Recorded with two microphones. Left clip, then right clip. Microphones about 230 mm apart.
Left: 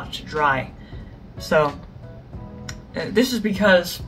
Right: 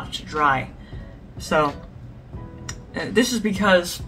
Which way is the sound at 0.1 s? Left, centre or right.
Centre.